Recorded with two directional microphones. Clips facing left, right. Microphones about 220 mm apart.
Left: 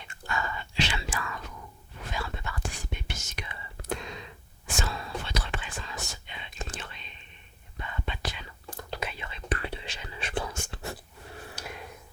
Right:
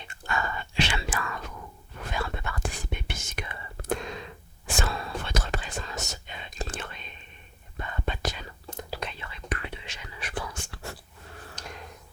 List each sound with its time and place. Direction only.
0.3 s whispering: 55° right (ahead or behind)
8.9 s whispering: 5° left (ahead or behind)
9.1 s whispering: 20° left (ahead or behind)
9.5 s whispering: 35° left (ahead or behind)
11.4 s a sound: 5° left (ahead or behind)